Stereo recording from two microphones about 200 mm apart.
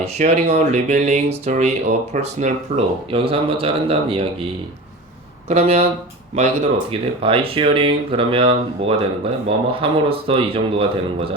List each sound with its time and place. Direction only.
0.0 s speech: 35° right (ahead or behind)
5.5 s speech: 30° right (ahead or behind)
6.9 s speech: 25° right (ahead or behind)